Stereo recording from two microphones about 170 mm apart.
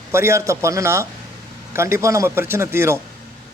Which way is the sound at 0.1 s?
15° right (ahead or behind).